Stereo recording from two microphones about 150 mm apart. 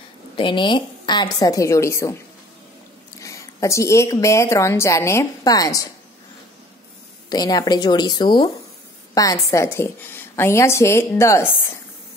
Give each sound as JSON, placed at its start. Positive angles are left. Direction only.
{"t": 0.4, "sound": "a woman's voice", "side_deg": 35}
{"t": 3.2, "sound": "a woman's voice", "side_deg": 20}
{"t": 7.2, "sound": "a woman's voice", "side_deg": 25}